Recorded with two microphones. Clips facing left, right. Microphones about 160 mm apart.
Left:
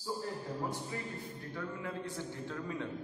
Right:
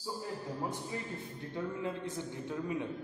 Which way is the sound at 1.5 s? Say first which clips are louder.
Right 4 dB; 20° right (ahead or behind).